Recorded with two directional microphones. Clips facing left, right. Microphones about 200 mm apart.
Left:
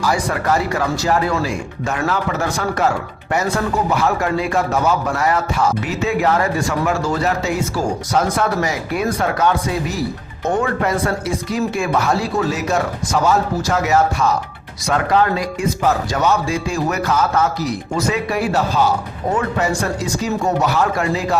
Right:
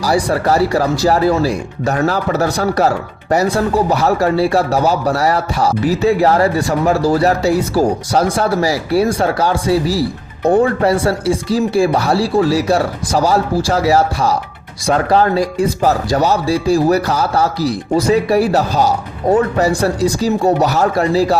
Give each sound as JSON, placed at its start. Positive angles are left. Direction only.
{"t": 0.0, "sound": "speech", "side_deg": -35}